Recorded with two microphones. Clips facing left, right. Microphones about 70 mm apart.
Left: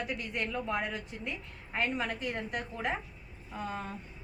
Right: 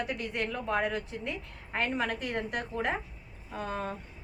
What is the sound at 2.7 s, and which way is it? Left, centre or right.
A woman's voice, right.